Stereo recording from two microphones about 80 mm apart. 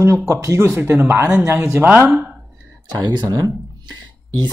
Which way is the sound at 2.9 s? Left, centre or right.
Right.